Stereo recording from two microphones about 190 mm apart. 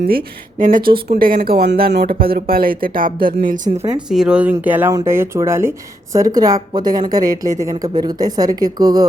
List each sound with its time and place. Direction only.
0.0 s speech: 50° right (ahead or behind)
4.1 s a woman's voice: 5° right (ahead or behind); by 9.0 s 20° right (ahead or behind)